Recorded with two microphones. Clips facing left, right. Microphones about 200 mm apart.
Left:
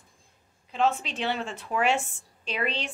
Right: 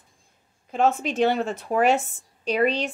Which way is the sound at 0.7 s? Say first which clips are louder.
Right 4 dB; 45° right (ahead or behind).